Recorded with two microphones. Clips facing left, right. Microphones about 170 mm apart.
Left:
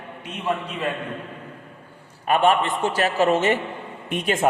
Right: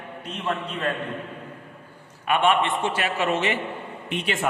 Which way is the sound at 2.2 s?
40° left (ahead or behind).